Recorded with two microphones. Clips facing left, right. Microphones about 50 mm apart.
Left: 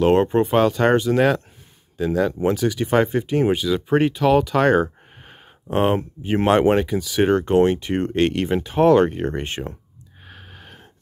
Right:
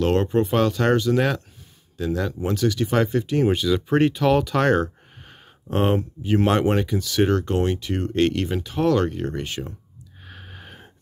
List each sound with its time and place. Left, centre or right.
0.0 s speech: left
0.6 s speech: centre
3.6 s speech: centre
5.9 s speech: left
6.8 s speech: centre
7.2 s speech: left
10.2 s gasp: centre